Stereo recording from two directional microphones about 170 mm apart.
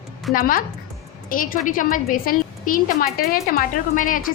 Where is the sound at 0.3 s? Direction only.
55° left (ahead or behind).